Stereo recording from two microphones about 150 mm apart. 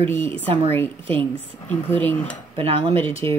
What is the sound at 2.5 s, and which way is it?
Speech, 35° right (ahead or behind).